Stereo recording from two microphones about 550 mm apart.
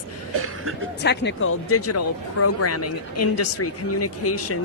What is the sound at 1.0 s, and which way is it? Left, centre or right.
Speech, centre.